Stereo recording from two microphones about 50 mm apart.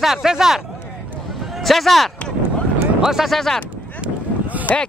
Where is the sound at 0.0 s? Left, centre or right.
Centre.